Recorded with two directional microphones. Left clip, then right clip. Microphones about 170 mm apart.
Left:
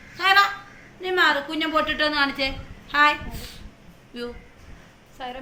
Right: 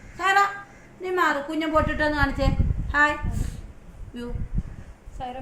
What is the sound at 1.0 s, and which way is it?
A woman's voice, 45° right (ahead or behind).